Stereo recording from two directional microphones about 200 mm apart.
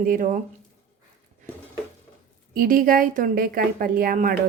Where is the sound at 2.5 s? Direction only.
45° right (ahead or behind).